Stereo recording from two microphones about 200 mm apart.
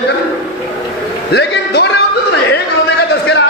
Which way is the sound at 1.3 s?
55° left (ahead or behind).